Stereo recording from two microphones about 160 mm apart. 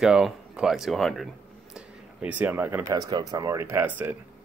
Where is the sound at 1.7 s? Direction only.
10° right (ahead or behind).